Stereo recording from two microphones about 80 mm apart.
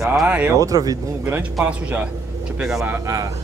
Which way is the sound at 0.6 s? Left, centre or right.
Right.